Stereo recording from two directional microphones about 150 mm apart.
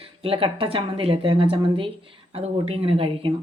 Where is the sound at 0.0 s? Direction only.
35° right (ahead or behind).